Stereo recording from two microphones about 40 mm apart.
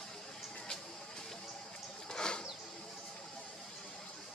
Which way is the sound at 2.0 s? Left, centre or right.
Centre.